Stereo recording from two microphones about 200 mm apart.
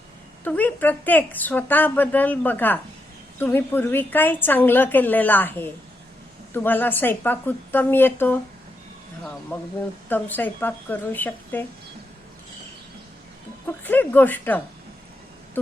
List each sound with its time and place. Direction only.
0.4 s a woman's voice: 10° left (ahead or behind)
10.1 s a woman's voice: 10° left (ahead or behind)
13.7 s a woman's voice: 10° left (ahead or behind)